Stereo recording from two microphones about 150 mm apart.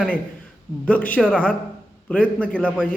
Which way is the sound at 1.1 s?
5° left (ahead or behind).